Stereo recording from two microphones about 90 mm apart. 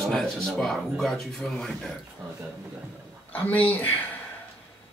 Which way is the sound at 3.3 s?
20° left (ahead or behind).